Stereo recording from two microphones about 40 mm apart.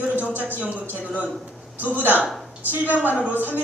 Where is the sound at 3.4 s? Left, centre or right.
Right.